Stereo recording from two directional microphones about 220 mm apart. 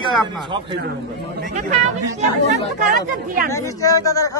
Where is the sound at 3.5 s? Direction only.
15° left (ahead or behind).